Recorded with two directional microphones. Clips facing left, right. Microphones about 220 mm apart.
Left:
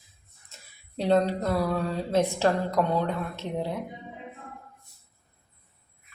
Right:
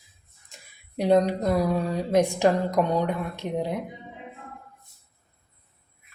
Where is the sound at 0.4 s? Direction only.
15° right (ahead or behind).